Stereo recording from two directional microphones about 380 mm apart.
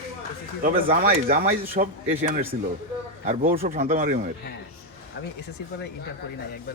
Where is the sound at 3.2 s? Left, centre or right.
Centre.